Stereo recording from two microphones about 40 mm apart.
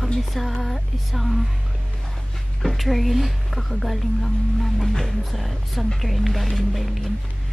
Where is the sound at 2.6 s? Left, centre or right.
Centre.